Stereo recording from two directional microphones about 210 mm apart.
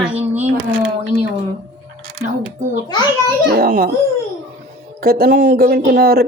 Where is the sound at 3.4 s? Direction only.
45° right (ahead or behind).